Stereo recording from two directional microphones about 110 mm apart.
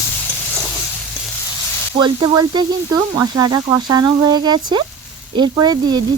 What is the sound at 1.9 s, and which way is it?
Speech, 40° right (ahead or behind).